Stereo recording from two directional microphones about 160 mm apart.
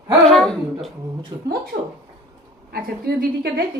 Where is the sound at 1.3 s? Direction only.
30° right (ahead or behind).